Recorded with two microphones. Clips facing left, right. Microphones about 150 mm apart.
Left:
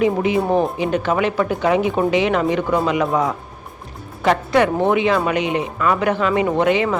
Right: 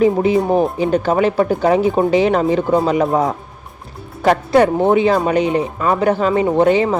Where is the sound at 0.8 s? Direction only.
35° right (ahead or behind).